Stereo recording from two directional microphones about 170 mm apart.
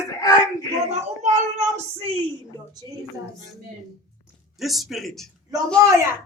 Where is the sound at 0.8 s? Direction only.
45° right (ahead or behind).